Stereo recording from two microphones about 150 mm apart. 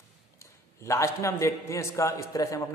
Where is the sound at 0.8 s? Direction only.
20° left (ahead or behind).